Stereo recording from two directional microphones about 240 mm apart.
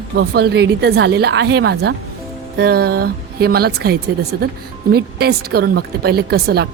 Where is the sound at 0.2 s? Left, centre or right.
Right.